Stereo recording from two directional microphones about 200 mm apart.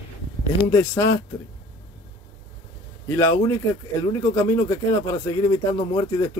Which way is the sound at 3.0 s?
15° left (ahead or behind).